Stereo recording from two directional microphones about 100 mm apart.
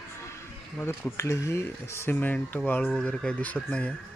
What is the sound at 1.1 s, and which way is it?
Speech, 30° left (ahead or behind).